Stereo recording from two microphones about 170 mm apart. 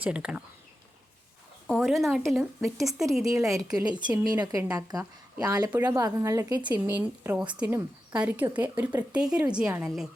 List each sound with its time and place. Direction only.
0.0 s speech: 5° right (ahead or behind)
1.6 s a woman's voice: centre (ahead or behind); by 6.7 s 20° right (ahead or behind)
6.7 s speech: 10° right (ahead or behind)